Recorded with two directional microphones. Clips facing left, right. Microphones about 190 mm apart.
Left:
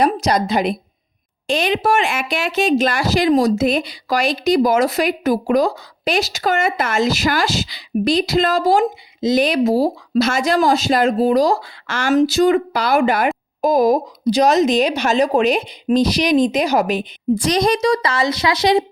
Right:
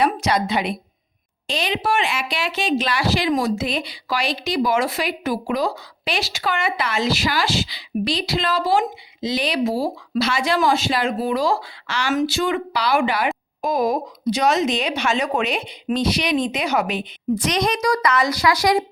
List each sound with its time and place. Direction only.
0.0 s a woman's voice: 40° left (ahead or behind); by 18.9 s 25° left (ahead or behind)